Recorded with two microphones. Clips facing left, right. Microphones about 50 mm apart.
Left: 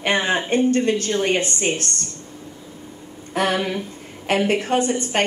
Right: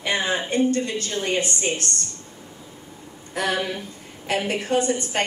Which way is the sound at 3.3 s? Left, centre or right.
Left.